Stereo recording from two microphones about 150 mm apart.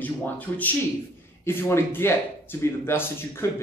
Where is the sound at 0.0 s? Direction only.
10° left (ahead or behind).